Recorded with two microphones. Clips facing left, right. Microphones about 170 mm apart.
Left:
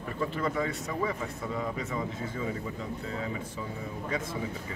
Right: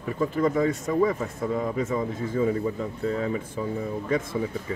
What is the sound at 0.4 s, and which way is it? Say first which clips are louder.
Speech: right 10 dB; 45° right (ahead or behind).